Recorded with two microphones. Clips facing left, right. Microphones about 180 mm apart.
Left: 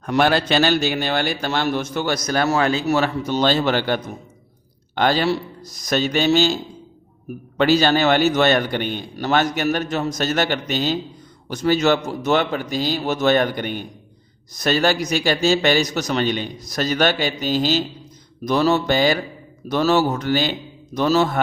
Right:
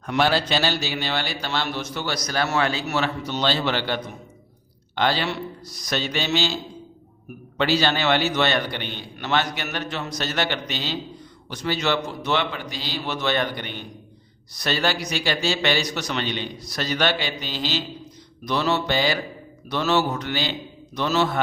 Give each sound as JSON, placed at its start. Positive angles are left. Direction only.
{"t": 0.0, "sound": "a man's voice", "side_deg": 50}
{"t": 7.6, "sound": "a man's voice", "side_deg": 45}